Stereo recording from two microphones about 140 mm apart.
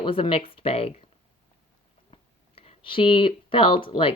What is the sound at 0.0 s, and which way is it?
Speech, 40° left (ahead or behind).